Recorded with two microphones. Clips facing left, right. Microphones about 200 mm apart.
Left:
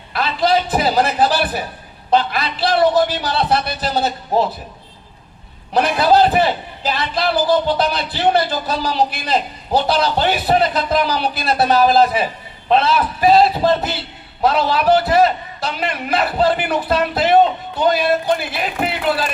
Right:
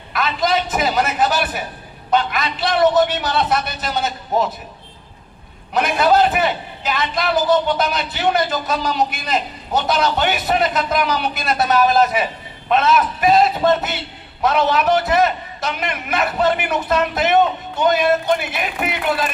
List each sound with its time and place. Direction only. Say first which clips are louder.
0.1 s a sound: left 2 dB; 30° left (ahead or behind)
2.0 s a man's voice: left 2 dB; 35° left (ahead or behind)
5.7 s a man's voice: left 2 dB; 35° left (ahead or behind)